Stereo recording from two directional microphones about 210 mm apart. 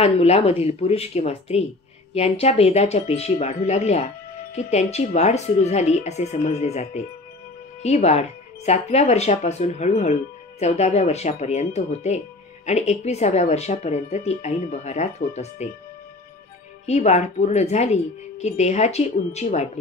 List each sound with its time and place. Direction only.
0.0 s a woman's voice: 30° left (ahead or behind)
16.8 s speech: 35° left (ahead or behind)